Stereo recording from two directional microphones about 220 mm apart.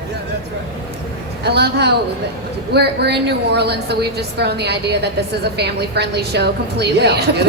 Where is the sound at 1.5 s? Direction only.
50° right (ahead or behind).